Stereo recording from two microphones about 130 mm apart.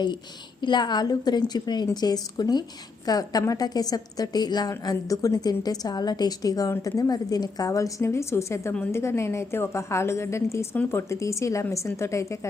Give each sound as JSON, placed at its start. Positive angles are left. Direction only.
{"t": 0.6, "sound": "a woman's voice", "side_deg": 35}